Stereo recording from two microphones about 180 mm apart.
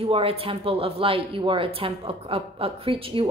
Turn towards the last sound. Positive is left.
turn(degrees=-30)  # may be behind; listen again after turning